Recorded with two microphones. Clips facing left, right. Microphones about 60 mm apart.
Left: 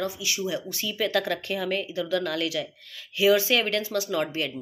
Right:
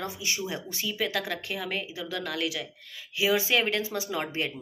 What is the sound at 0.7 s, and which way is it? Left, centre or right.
Speech, centre.